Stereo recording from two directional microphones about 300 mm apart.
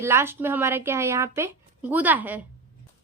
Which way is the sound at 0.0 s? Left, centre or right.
Centre.